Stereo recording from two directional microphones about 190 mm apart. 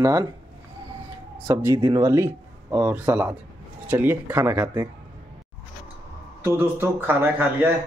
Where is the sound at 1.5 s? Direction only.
15° right (ahead or behind).